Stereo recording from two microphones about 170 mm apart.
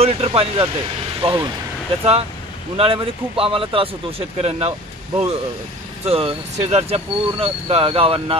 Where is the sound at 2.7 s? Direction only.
30° right (ahead or behind).